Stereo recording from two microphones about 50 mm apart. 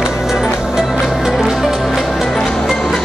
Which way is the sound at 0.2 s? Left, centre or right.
Centre.